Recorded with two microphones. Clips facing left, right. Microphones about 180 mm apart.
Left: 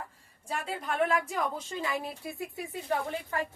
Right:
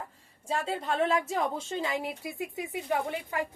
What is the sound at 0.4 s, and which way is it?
A woman's voice, 25° right (ahead or behind).